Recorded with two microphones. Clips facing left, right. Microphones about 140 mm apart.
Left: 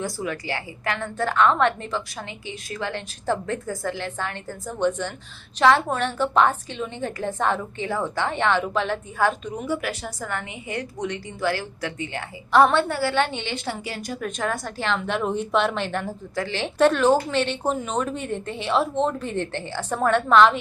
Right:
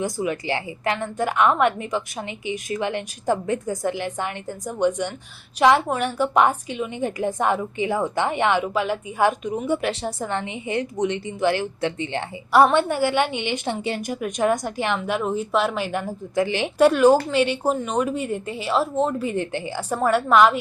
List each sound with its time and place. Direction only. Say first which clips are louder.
0.0 s a woman's voice: right 4 dB; 20° right (ahead or behind)
9.6 s a woman's voice: right 3 dB; 25° right (ahead or behind)
12.5 s a woman's voice: right 1 dB; 10° right (ahead or behind)
14.9 s a woman's voice: right 1 dB; 5° right (ahead or behind)